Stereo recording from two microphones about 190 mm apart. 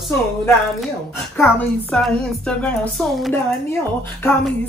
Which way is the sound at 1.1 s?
10° left (ahead or behind).